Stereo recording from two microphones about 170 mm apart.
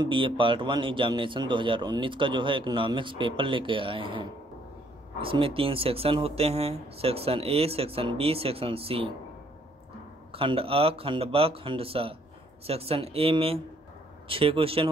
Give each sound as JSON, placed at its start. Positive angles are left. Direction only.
{"t": 0.0, "sound": "a man's voice", "side_deg": -30}
{"t": 10.3, "sound": "speech", "side_deg": -35}